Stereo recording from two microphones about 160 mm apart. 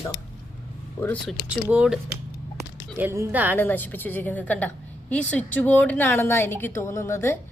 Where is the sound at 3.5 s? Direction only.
10° left (ahead or behind).